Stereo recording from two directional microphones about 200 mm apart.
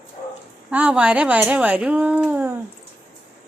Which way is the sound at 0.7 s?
5° right (ahead or behind).